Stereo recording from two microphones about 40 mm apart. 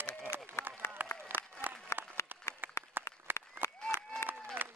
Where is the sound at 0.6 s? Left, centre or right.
Left.